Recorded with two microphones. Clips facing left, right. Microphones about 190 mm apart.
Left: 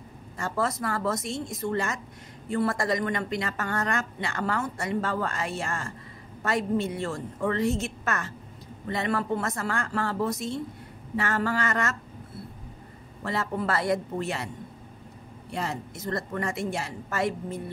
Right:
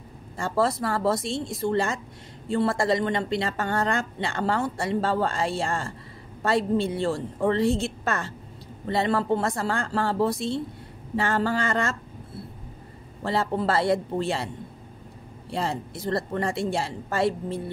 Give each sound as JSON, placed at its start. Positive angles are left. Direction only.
{"t": 0.4, "sound": "a woman's voice", "side_deg": -30}
{"t": 13.2, "sound": "a woman's voice", "side_deg": -30}
{"t": 15.5, "sound": "a woman's voice", "side_deg": -30}